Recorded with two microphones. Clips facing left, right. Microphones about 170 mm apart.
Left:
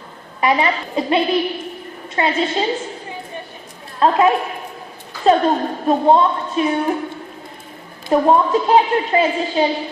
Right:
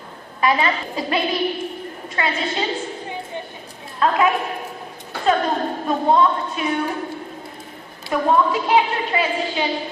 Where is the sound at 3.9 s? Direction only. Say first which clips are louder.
Left 4 dB; 30° left (ahead or behind).